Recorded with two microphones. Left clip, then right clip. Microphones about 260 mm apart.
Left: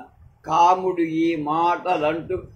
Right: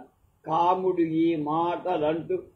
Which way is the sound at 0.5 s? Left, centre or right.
Left.